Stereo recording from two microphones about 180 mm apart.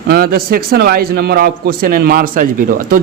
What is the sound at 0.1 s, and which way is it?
A man's voice, 55° right (ahead or behind).